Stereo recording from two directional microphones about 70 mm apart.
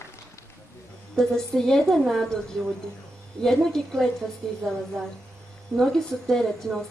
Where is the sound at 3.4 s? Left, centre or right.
Centre.